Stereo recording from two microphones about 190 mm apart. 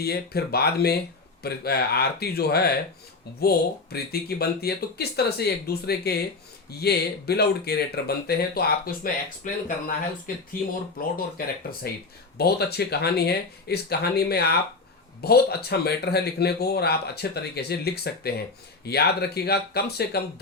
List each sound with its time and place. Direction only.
0.0 s speech: 55° left (ahead or behind)
9.0 s speech: 45° left (ahead or behind)
10.9 s speech: 50° left (ahead or behind)